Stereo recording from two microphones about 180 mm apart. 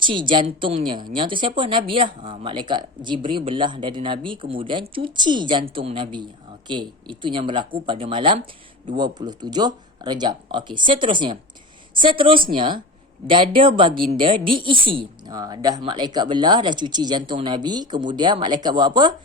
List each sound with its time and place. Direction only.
0.0 s a woman's voice: 25° right (ahead or behind)
13.9 s speech: 55° right (ahead or behind)
14.2 s a woman's voice: 30° right (ahead or behind)